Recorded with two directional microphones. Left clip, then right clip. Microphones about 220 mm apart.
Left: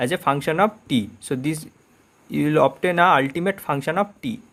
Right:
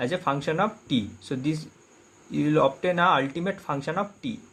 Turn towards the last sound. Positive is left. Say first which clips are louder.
# left 6 dB
turn(degrees=35)  # may be behind; listen again after turning